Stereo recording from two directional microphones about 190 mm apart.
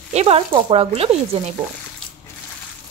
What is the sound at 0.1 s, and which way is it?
Speech, 35° right (ahead or behind).